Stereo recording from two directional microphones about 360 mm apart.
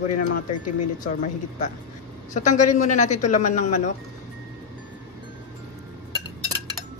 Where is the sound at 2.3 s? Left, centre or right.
Centre.